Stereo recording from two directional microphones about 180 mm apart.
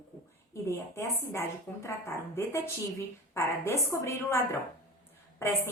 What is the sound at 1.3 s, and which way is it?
A woman's voice, 15° left (ahead or behind).